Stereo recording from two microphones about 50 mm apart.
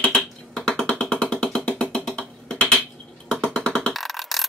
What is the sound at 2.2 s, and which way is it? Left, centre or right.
Music, centre.